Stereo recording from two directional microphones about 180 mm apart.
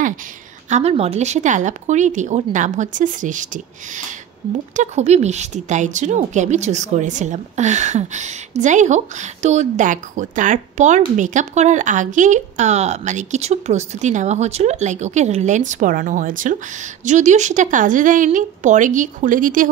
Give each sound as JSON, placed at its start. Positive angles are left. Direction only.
{"t": 0.7, "sound": "a woman's voice", "side_deg": -40}